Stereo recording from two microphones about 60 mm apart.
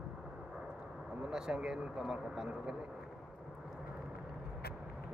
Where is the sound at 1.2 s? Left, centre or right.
Centre.